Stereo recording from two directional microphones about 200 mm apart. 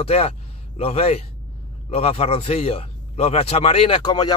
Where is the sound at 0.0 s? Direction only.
30° left (ahead or behind).